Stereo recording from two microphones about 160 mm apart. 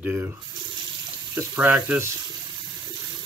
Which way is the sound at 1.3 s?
10° right (ahead or behind).